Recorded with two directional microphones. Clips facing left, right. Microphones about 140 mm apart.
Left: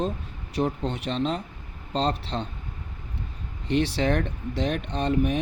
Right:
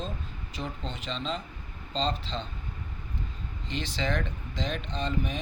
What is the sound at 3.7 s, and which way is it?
Speech, 60° left (ahead or behind).